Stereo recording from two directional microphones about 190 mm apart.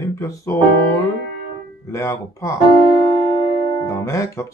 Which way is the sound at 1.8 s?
15° left (ahead or behind).